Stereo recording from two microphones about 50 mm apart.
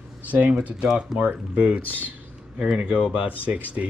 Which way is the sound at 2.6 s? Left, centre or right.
Centre.